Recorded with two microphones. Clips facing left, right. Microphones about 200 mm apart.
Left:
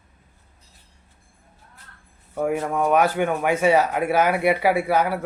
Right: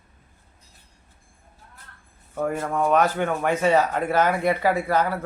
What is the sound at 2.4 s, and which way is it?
Speech, 10° left (ahead or behind).